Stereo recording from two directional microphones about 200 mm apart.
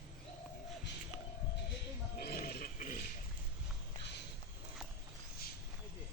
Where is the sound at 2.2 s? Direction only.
50° left (ahead or behind).